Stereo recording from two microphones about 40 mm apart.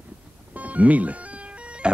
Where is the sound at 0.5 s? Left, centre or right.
Right.